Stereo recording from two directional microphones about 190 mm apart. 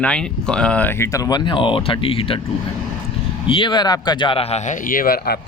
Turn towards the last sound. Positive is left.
turn(degrees=50)  # may be behind; listen again after turning